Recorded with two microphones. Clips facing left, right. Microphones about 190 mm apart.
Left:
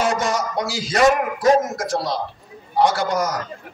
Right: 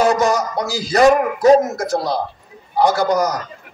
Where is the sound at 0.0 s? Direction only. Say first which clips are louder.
Right 5 dB; 35° right (ahead or behind).